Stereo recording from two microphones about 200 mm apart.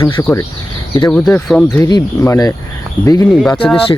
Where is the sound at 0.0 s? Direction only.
15° left (ahead or behind).